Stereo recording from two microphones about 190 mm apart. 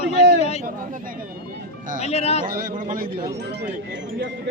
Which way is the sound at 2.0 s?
35° left (ahead or behind).